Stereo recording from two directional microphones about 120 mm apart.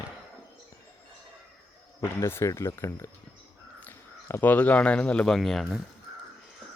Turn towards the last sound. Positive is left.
turn(degrees=0)  # may be behind; listen again after turning